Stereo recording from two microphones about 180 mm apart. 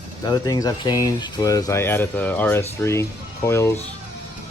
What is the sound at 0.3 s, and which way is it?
Speech, 20° left (ahead or behind).